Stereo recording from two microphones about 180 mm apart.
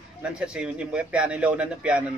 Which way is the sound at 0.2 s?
5° right (ahead or behind).